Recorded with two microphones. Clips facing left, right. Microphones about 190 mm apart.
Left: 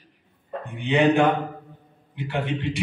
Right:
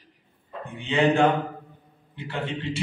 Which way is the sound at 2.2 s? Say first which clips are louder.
Left 4 dB; 15° left (ahead or behind).